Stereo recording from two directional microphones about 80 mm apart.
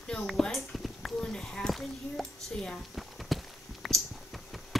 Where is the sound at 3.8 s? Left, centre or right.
Centre.